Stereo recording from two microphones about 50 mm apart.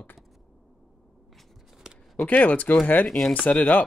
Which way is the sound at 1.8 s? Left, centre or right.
Centre.